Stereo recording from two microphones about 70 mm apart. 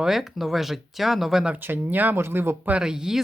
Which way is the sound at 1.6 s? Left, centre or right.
Right.